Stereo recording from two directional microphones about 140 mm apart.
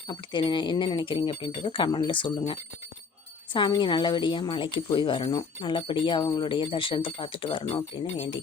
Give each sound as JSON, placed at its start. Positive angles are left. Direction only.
{"t": 0.1, "sound": "speech", "side_deg": 35}